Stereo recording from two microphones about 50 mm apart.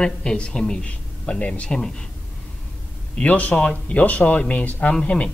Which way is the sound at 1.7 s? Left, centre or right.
Centre.